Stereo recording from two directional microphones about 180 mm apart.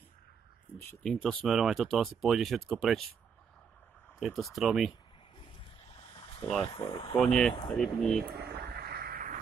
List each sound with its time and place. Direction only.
0.7 s speech: 10° left (ahead or behind)
4.2 s speech: centre (ahead or behind)
6.4 s speech: 5° left (ahead or behind)
6.7 s speech: 30° left (ahead or behind)
7.2 s speech: 5° left (ahead or behind)
8.2 s a sound: 60° right (ahead or behind)